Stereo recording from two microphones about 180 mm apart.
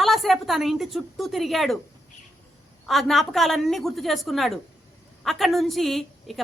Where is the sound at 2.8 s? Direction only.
Centre (ahead or behind).